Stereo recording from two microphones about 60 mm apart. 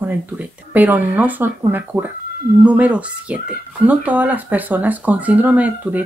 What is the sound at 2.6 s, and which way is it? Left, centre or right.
Speech, right.